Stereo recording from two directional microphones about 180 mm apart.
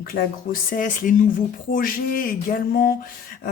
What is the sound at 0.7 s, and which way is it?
Speech, 45° left (ahead or behind).